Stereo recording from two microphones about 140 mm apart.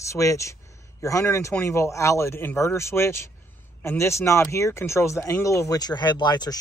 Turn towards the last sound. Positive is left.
turn(degrees=30)  # may be behind; listen again after turning